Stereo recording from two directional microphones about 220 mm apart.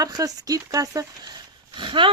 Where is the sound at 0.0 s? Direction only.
15° right (ahead or behind).